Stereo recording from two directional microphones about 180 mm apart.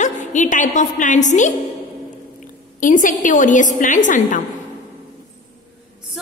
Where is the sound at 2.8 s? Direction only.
45° left (ahead or behind).